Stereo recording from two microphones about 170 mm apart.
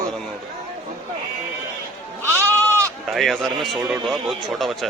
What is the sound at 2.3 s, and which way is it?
Goat, 15° right (ahead or behind).